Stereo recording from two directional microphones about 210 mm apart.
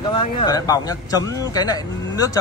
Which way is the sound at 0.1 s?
25° left (ahead or behind).